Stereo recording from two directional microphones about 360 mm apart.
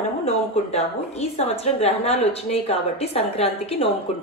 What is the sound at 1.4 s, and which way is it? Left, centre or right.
A woman's voice, centre.